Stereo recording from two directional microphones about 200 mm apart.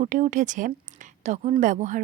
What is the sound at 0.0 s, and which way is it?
Speech, 40° right (ahead or behind).